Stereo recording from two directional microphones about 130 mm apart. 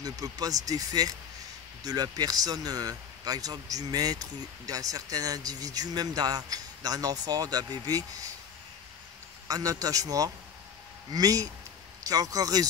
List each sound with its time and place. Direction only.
0.0 s a man's voice: 30° right (ahead or behind)
9.5 s a man's voice: 25° right (ahead or behind)